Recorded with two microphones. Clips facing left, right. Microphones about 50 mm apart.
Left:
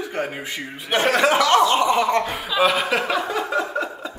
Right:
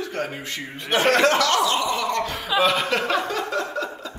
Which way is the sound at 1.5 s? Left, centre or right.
Left.